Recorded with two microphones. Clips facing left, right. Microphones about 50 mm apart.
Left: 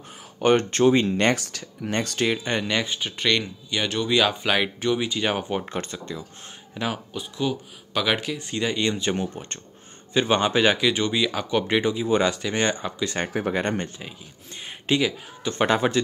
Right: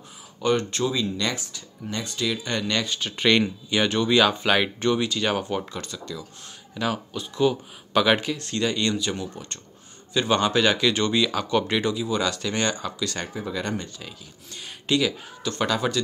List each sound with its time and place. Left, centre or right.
0.4 s speech: left
1.4 s speech: left
2.2 s speech: left
3.2 s speech: centre
5.0 s speech: centre
5.7 s speech: left
6.7 s speech: centre
7.3 s speech: centre
8.4 s speech: centre
9.0 s speech: left
13.5 s speech: left
14.6 s speech: left